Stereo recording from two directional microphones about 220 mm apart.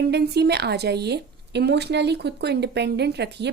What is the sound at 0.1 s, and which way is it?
A woman's voice, 50° right (ahead or behind).